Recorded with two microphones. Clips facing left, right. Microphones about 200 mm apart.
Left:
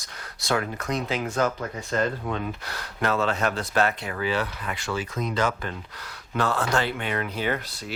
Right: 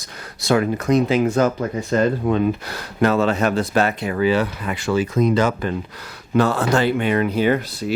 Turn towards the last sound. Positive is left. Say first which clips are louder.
# right 9 dB
turn(degrees=-10)  # may be behind; listen again after turning